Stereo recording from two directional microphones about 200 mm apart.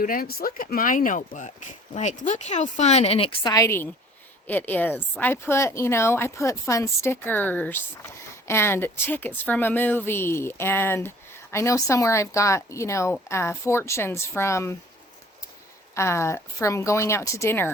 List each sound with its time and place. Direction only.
0.0 s speech: 45° left (ahead or behind); by 14.8 s 15° left (ahead or behind)
16.0 s speech: 15° left (ahead or behind)